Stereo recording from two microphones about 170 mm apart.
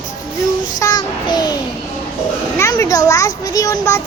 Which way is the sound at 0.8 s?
25° left (ahead or behind).